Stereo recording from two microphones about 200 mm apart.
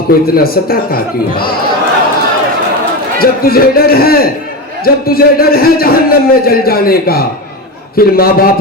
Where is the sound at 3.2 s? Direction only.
50° left (ahead or behind).